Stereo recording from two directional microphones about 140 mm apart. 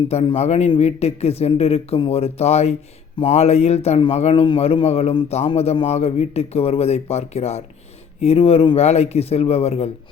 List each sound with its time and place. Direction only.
0.3 s a man's voice: 50° left (ahead or behind)